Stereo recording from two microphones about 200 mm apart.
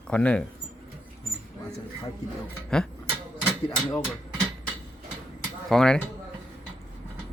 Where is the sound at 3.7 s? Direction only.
20° left (ahead or behind).